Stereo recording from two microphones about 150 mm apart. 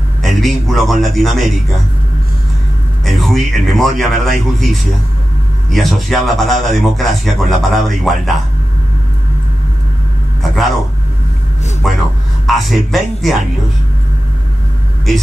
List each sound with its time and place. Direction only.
0.2 s a man's voice: centre (ahead or behind)
3.1 s a man's voice: centre (ahead or behind)
5.7 s a man's voice: centre (ahead or behind)
10.4 s a man's voice: centre (ahead or behind)
11.8 s a man's voice: centre (ahead or behind)